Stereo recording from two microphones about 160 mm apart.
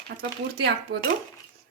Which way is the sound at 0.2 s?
90° right.